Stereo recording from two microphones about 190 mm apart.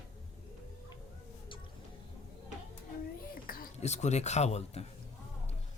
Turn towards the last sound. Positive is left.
turn(degrees=35)  # may be behind; listen again after turning